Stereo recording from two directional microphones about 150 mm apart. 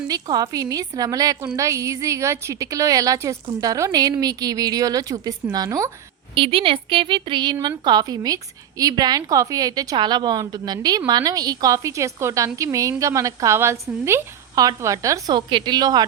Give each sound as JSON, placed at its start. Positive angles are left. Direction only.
{"t": 0.1, "sound": "a woman's voice", "side_deg": -25}
{"t": 6.3, "sound": "a woman's voice", "side_deg": -35}